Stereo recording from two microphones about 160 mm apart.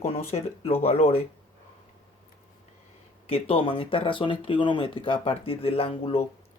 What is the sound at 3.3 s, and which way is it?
Speech, 35° left (ahead or behind).